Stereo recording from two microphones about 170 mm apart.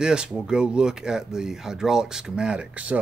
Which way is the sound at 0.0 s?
5° right (ahead or behind).